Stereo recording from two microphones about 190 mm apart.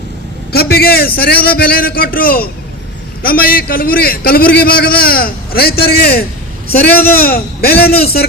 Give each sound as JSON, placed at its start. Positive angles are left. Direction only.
{"t": 0.5, "sound": "a man's voice", "side_deg": 55}